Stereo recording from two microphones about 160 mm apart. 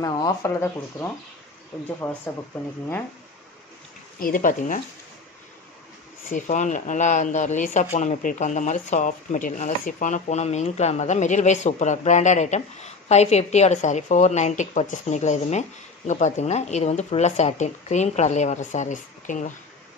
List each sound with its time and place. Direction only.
0.0 s speech: 20° left (ahead or behind)
4.2 s speech: 55° left (ahead or behind)
6.3 s speech: 50° left (ahead or behind)